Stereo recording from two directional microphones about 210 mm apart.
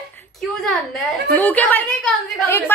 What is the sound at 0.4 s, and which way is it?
A woman's voice, centre (ahead or behind).